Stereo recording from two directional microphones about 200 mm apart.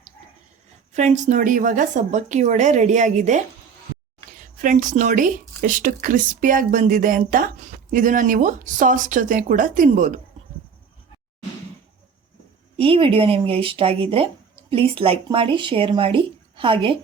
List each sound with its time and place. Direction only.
0.9 s speech: 35° right (ahead or behind)
12.7 s speech: 30° right (ahead or behind)